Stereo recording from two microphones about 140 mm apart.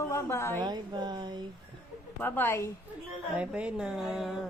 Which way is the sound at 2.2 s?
15° left (ahead or behind).